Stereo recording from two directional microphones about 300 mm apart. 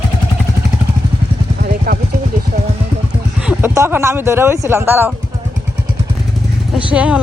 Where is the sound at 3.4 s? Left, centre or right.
Centre.